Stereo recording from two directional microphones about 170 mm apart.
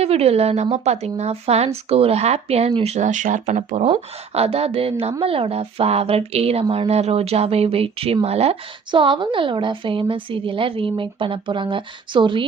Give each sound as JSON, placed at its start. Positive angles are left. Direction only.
{"t": 0.0, "sound": "speech", "side_deg": -35}